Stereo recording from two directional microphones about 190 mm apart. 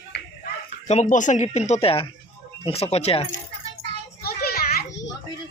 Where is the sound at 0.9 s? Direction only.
40° left (ahead or behind).